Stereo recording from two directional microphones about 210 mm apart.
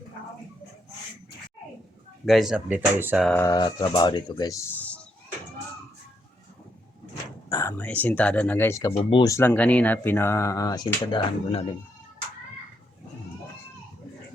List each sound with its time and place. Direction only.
2.2 s speech: centre (ahead or behind)
3.2 s speech: 10° left (ahead or behind)
7.5 s speech: 15° left (ahead or behind)